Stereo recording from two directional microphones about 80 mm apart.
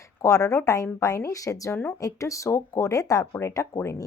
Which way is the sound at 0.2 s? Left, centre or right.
Left.